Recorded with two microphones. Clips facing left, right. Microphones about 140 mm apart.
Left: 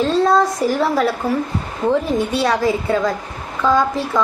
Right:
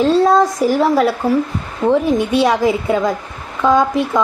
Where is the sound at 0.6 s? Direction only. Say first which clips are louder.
Right 3 dB; 10° right (ahead or behind).